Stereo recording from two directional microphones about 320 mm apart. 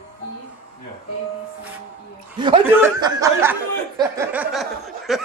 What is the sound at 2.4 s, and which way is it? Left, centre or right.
Chuckle, centre.